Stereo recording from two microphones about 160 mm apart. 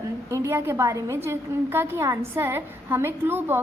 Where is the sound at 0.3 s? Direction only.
20° right (ahead or behind).